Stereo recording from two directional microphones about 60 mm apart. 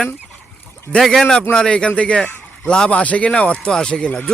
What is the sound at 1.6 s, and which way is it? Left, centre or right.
Speech, centre.